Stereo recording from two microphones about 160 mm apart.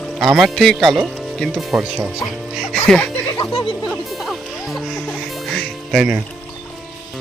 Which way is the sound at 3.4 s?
40° left (ahead or behind).